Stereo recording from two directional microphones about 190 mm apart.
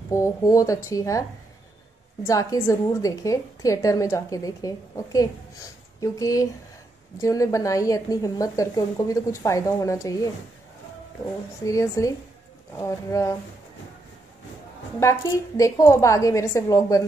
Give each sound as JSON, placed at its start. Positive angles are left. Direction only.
{"t": 0.1, "sound": "a woman's voice", "side_deg": 15}
{"t": 2.2, "sound": "a woman's voice", "side_deg": 15}
{"t": 11.6, "sound": "a woman's voice", "side_deg": 15}
{"t": 15.0, "sound": "a woman's voice", "side_deg": 15}